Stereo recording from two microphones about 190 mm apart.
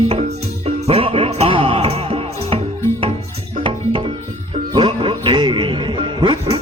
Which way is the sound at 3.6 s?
30° right (ahead or behind).